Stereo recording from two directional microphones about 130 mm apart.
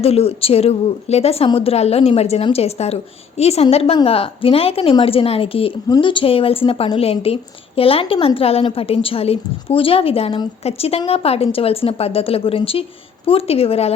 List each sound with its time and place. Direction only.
0.0 s a woman's voice: 50° left (ahead or behind)